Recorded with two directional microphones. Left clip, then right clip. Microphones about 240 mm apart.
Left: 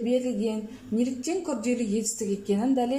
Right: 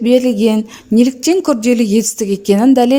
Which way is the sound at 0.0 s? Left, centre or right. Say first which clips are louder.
Right 15 dB; right.